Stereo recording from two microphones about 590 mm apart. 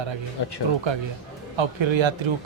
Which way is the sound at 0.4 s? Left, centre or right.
Left.